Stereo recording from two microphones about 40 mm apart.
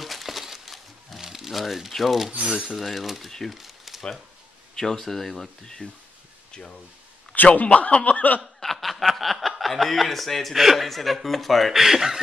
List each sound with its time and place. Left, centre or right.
0.0 s a sound: centre
1.2 s crumpling: centre
2.5 s speech: centre
3.3 s speech: centre
3.5 s a sound: centre
4.7 s speech: centre
7.6 s speech: left
8.7 s snicker: centre
9.6 s speech: centre
11.7 s speech: centre